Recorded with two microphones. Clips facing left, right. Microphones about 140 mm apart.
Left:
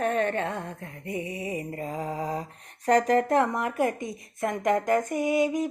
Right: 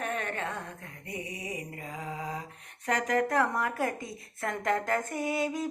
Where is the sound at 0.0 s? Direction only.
35° left (ahead or behind).